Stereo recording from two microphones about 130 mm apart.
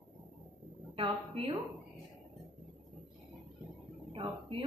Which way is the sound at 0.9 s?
45° right (ahead or behind).